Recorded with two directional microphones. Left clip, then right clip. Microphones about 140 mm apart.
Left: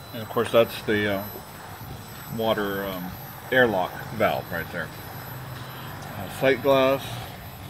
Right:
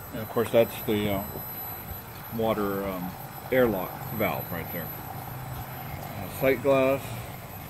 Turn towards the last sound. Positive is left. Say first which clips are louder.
# left 3 dB
turn(degrees=5)  # may be behind; listen again after turning